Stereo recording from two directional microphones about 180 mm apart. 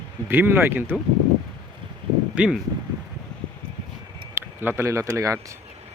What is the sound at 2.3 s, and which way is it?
Speech, 5° right (ahead or behind).